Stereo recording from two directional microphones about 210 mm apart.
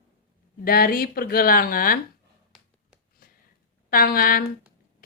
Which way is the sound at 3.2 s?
45° left (ahead or behind).